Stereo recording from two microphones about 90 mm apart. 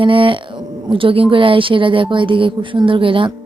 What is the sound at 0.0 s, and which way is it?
Speech, 75° right (ahead or behind).